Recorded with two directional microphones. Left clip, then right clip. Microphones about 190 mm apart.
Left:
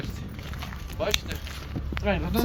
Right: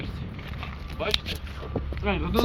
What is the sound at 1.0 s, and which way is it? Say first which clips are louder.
Speech: even; 35° left (ahead or behind).